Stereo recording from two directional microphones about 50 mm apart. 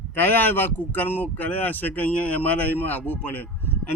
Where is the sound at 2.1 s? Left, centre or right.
Left.